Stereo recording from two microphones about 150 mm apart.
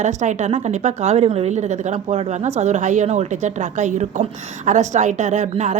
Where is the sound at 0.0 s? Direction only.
55° right (ahead or behind).